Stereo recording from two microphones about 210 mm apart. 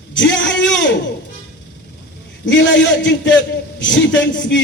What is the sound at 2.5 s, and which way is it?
A man's voice, 60° left (ahead or behind).